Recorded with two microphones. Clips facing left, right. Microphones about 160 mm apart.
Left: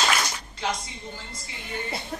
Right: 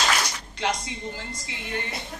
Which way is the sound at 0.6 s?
85° right.